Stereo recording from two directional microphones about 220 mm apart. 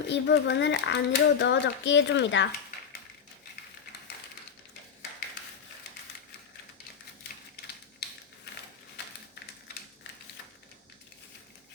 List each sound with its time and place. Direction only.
0.1 s a child's voice: 55° left (ahead or behind)